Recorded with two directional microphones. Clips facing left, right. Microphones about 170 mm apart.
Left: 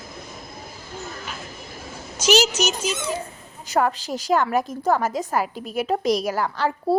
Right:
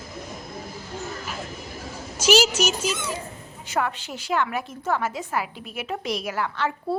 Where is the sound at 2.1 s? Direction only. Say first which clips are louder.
Even; 10° right (ahead or behind).